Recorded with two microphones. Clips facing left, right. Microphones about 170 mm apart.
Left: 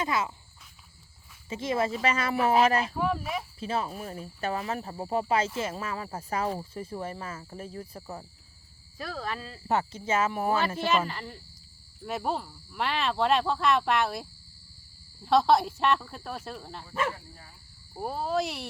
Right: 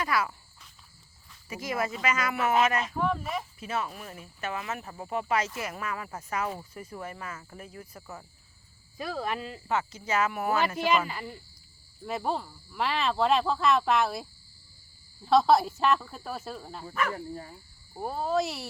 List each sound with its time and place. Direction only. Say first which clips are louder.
0.0 s speech: even; 25° left (ahead or behind)
1.5 s speech: left 3 dB; 25° left (ahead or behind)
3.0 s speech: even; 5° left (ahead or behind)
3.6 s speech: left 2 dB; 30° left (ahead or behind)
9.1 s speech: right 3 dB; 15° right (ahead or behind)
9.6 s speech: left 3 dB; 35° left (ahead or behind)
10.8 s speech: right 1 dB; 10° right (ahead or behind)
12.0 s speech: even; centre (ahead or behind)
16.9 s speech: even; 25° left (ahead or behind)
17.2 s speech: right 13 dB; 45° right (ahead or behind)
17.9 s speech: right 1 dB; 5° left (ahead or behind)